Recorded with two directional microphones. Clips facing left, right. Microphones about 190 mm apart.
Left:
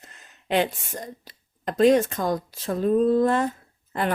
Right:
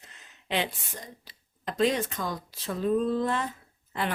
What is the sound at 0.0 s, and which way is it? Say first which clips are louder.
Speech: left 4 dB; 45° left (ahead or behind).